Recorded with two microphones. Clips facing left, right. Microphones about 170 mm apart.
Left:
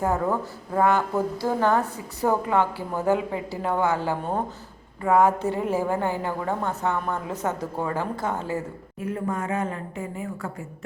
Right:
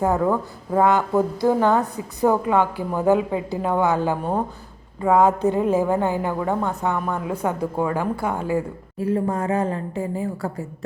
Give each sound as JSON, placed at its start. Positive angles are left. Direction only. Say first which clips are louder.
{"t": 0.0, "sound": "a woman's voice", "louder": "right 4 dB", "side_deg": -15}
{"t": 9.0, "sound": "a woman's voice", "louder": "right 6 dB", "side_deg": -30}